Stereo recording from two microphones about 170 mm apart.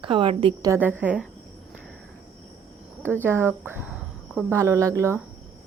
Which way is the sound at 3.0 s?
15° right (ahead or behind).